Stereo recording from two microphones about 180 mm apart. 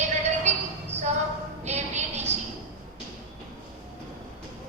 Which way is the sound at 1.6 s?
40° right (ahead or behind).